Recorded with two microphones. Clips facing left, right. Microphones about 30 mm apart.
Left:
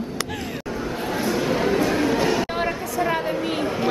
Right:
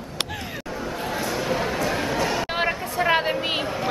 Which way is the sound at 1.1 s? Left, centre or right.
Centre.